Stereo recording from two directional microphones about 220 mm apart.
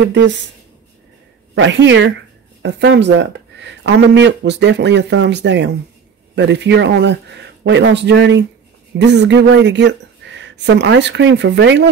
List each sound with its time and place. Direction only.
1.5 s speech: 55° right (ahead or behind)